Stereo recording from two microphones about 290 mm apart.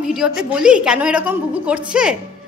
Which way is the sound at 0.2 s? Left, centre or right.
Centre.